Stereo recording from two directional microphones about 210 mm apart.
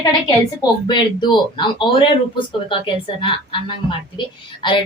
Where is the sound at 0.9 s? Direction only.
20° left (ahead or behind).